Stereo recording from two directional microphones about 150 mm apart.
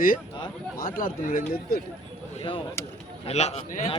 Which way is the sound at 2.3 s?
35° left (ahead or behind).